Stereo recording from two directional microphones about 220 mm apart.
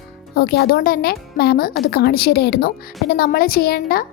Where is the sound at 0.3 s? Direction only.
45° left (ahead or behind).